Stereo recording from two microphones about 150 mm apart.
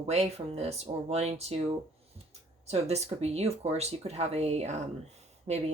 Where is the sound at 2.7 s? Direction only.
45° right (ahead or behind).